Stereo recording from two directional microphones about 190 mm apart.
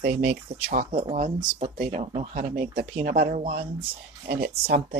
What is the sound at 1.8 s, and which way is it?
Speech, 40° right (ahead or behind).